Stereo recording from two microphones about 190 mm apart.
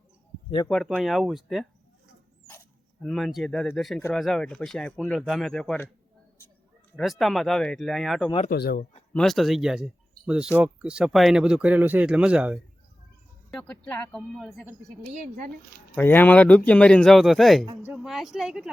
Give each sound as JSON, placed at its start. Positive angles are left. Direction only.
{"t": 0.7, "sound": "speech", "side_deg": 0}
{"t": 3.0, "sound": "speech", "side_deg": 0}
{"t": 6.9, "sound": "speech", "side_deg": 0}
{"t": 8.4, "sound": "speech", "side_deg": 55}
{"t": 9.1, "sound": "speech", "side_deg": 0}
{"t": 13.5, "sound": "speech", "side_deg": 5}
{"t": 14.8, "sound": "a woman's voice", "side_deg": -40}
{"t": 16.0, "sound": "speech", "side_deg": 10}